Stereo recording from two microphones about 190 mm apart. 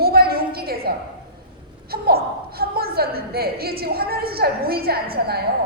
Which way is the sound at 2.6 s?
55° right (ahead or behind).